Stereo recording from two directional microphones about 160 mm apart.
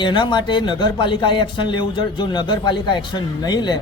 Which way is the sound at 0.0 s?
30° left (ahead or behind).